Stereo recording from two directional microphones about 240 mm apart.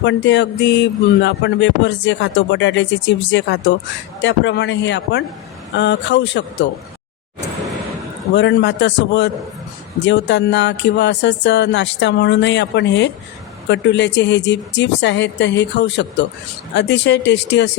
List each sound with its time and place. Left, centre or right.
0.0 s speech: left
8.4 s speech: left